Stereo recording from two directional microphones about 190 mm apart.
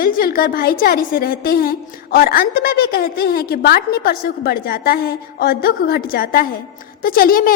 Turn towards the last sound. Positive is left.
turn(degrees=50)  # may be behind; listen again after turning